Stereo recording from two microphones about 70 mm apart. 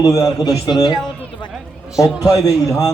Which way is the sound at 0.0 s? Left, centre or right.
Left.